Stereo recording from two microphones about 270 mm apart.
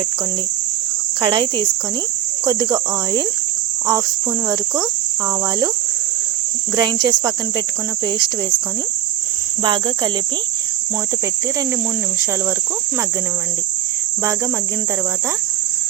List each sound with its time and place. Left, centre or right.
1.2 s cricket: centre
4.4 s cricket: centre
6.7 s cricket: centre
9.6 s cricket: centre